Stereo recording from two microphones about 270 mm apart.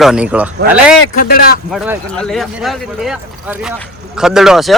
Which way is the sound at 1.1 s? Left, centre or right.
Left.